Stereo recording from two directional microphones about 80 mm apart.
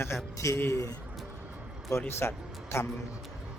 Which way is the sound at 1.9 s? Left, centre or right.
Left.